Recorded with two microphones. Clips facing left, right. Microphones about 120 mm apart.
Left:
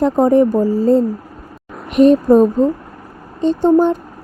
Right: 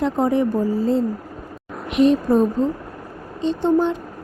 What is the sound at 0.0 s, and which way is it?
A child's voice, 40° left (ahead or behind).